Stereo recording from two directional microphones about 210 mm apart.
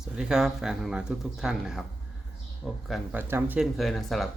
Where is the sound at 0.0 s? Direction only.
5° right (ahead or behind).